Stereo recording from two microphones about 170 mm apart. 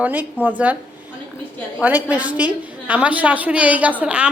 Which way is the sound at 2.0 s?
10° right (ahead or behind).